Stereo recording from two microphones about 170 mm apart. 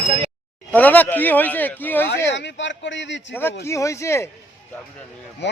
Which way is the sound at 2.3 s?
90° left.